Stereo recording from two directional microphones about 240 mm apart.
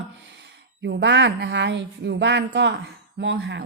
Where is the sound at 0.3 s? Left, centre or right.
Right.